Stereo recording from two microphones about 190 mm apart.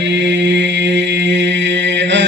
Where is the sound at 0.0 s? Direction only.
70° right (ahead or behind).